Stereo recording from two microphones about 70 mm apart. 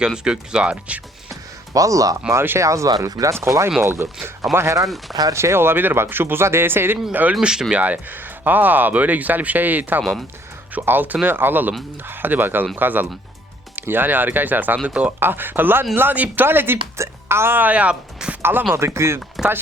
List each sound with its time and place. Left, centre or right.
0.0 s speech: centre
1.3 s music: right
2.3 s speech: right
2.6 s speech: right
3.4 s a woman's voice: right; by 15.1 s centre
15.2 s a woman's voice: right
18.7 s speech: right